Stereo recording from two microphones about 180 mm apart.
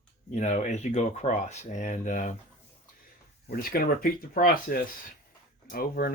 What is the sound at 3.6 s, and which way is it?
Speech, 55° left (ahead or behind).